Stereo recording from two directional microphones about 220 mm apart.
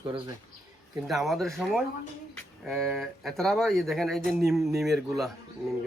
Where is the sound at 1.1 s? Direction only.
Centre (ahead or behind).